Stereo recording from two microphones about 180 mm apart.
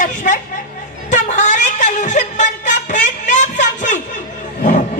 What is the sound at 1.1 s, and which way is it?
Music, 40° left (ahead or behind).